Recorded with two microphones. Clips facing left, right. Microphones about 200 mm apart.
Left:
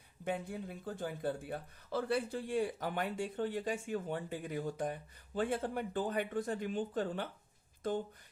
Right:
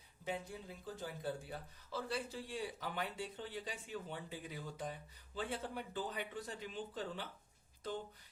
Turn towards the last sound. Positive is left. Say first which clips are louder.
# left 8 dB
turn(degrees=50)  # may be behind; listen again after turning